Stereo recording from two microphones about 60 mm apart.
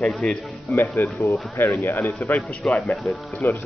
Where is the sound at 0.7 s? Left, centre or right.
Left.